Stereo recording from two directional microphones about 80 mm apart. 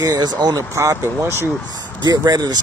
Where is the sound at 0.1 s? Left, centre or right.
Right.